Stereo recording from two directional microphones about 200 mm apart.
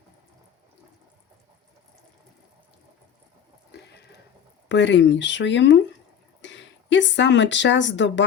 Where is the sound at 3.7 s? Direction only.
55° left (ahead or behind).